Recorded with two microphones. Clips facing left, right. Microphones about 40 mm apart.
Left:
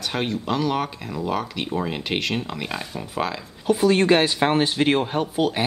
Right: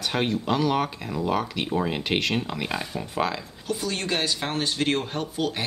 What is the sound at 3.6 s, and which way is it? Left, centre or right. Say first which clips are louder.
Speech: left 11 dB; left.